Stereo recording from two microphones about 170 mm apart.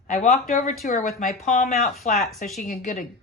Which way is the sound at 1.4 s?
40° left (ahead or behind).